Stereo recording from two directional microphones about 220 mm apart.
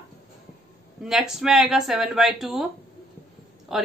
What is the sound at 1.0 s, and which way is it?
A woman's voice, centre (ahead or behind).